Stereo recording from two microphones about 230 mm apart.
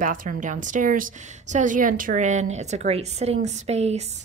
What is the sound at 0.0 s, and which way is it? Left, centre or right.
A woman's voice, right.